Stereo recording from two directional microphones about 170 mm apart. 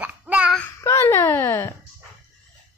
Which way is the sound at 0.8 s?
15° left (ahead or behind).